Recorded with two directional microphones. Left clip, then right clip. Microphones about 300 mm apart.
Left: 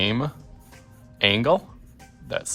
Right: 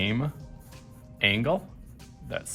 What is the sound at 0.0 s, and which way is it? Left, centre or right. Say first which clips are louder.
Music: left 5 dB; centre.